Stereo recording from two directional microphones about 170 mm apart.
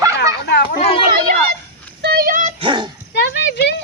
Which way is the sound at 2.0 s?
65° right (ahead or behind).